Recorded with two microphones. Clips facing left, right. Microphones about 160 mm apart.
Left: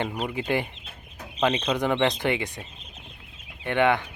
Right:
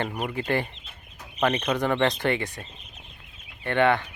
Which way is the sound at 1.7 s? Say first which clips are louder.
Even; 15° left (ahead or behind).